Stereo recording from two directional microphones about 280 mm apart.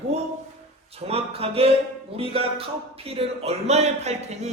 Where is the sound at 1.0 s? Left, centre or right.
Right.